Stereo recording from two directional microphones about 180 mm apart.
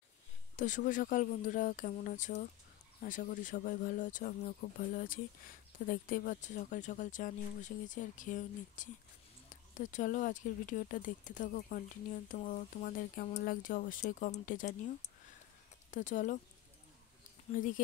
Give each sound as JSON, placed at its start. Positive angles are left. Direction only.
{"t": 0.6, "sound": "speech", "side_deg": 45}
{"t": 17.6, "sound": "speech", "side_deg": 50}